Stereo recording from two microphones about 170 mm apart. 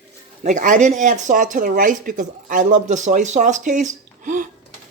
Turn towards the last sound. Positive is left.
turn(degrees=-50)  # may be behind; listen again after turning